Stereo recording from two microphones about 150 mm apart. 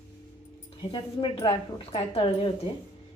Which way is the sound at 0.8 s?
35° left (ahead or behind).